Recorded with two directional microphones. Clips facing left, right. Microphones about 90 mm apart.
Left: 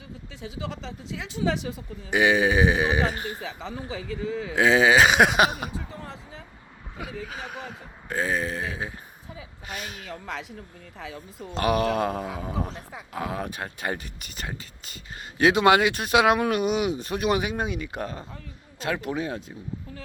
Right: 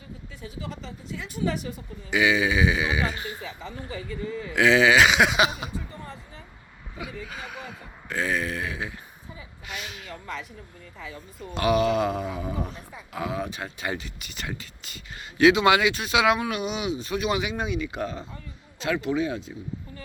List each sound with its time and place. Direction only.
0.4 s speech: 90° left
2.0 s speech: 45° left (ahead or behind)
3.4 s speech: 90° left
4.5 s speech: 35° left (ahead or behind)
5.7 s basketball bounce: 90° left
7.4 s a sound: 45° left (ahead or behind)
11.5 s speech: 45° left (ahead or behind)
12.4 s speech: 25° left (ahead or behind)
13.1 s speech: 45° left (ahead or behind)